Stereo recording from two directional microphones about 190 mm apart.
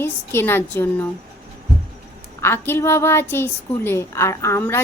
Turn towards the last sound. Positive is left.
turn(degrees=15)  # may be behind; listen again after turning